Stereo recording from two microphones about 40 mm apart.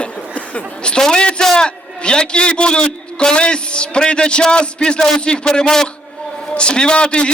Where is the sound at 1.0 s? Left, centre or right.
Left.